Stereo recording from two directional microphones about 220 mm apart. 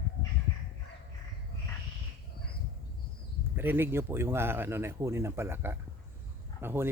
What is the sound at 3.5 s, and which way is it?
Speech, 10° right (ahead or behind).